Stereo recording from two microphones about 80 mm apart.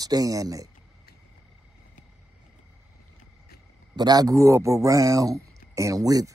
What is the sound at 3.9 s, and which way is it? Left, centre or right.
Speech, right.